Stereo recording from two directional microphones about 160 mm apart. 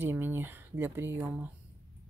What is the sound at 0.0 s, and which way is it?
Speech, 15° right (ahead or behind).